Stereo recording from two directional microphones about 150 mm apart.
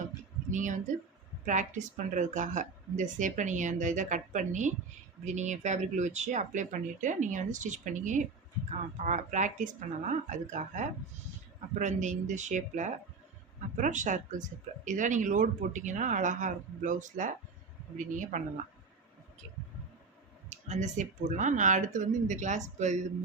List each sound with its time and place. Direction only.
0.5 s speech: 55° right (ahead or behind)
20.5 s speech: 50° right (ahead or behind)